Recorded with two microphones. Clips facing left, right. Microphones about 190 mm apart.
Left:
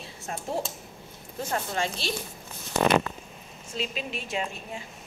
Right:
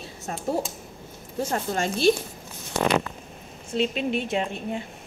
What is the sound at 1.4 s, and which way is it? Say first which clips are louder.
Speech: right 3 dB; 45° right (ahead or behind).